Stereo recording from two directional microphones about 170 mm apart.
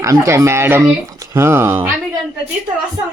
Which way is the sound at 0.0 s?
15° right (ahead or behind).